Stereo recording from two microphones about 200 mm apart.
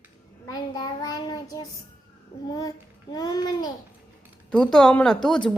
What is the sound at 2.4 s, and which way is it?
A child's voice, 20° left (ahead or behind).